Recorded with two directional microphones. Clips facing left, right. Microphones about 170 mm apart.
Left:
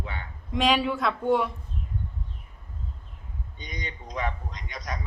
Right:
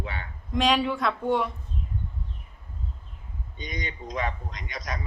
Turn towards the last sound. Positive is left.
turn(degrees=-85)